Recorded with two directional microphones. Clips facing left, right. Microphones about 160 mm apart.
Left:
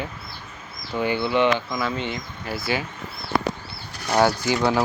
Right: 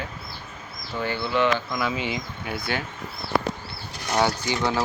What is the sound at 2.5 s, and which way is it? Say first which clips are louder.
Speech: left 3 dB; 5° left (ahead or behind).